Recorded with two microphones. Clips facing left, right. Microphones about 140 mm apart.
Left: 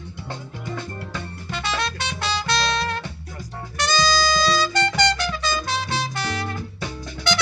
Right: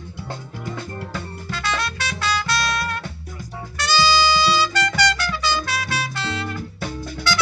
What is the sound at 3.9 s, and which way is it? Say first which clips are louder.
Music: right 3 dB; 5° right (ahead or behind).